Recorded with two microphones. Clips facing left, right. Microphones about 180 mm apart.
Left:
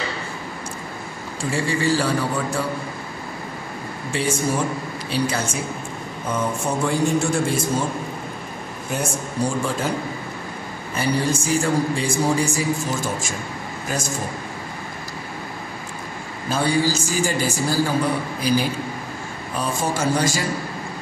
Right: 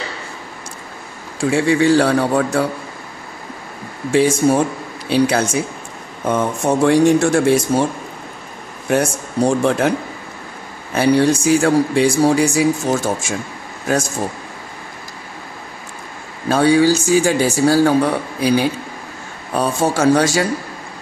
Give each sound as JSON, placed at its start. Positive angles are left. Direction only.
{"t": 1.4, "sound": "speech", "side_deg": -75}
{"t": 4.2, "sound": "speech", "side_deg": -75}
{"t": 8.9, "sound": "speech", "side_deg": -75}
{"t": 11.0, "sound": "speech", "side_deg": -75}
{"t": 16.4, "sound": "speech", "side_deg": -70}
{"t": 19.5, "sound": "speech", "side_deg": -70}